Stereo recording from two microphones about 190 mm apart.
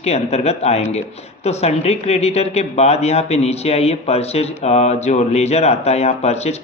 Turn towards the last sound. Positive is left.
turn(degrees=35)  # may be behind; listen again after turning